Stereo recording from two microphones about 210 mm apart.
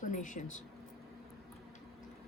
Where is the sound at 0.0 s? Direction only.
40° left (ahead or behind).